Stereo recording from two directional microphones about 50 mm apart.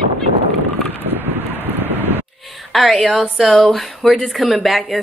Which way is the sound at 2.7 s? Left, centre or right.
Centre.